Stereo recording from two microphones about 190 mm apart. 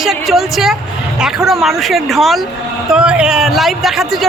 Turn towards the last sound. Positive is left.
turn(degrees=0)  # may be behind; listen again after turning